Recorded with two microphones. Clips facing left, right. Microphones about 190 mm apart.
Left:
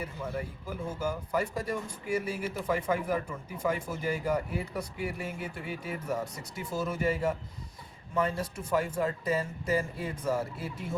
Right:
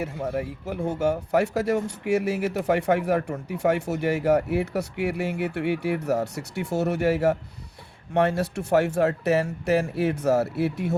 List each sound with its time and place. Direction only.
0.0 s speech: 75° right (ahead or behind)